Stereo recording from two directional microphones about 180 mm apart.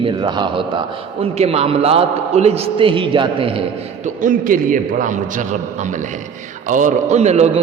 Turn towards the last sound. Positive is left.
turn(degrees=-35)  # may be behind; listen again after turning